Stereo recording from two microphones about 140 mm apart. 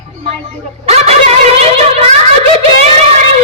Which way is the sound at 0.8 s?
50° right (ahead or behind).